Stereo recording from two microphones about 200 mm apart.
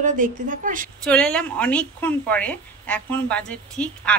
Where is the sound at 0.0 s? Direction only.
40° right (ahead or behind).